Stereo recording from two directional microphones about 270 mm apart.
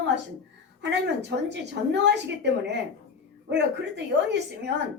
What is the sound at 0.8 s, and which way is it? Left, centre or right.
A woman's voice, right.